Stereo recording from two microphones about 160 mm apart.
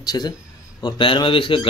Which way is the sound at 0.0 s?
25° left (ahead or behind).